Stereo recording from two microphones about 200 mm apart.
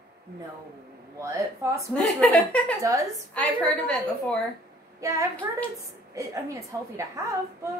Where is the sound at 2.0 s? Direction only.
5° left (ahead or behind).